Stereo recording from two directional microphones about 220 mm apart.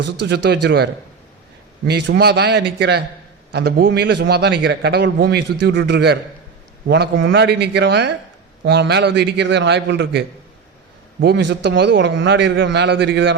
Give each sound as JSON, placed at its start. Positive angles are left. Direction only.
{"t": 0.3, "sound": "a man's voice", "side_deg": -50}
{"t": 1.9, "sound": "a man's voice", "side_deg": -50}